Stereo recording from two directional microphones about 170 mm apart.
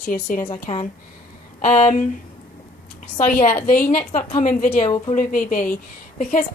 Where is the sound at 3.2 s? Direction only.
50° left (ahead or behind).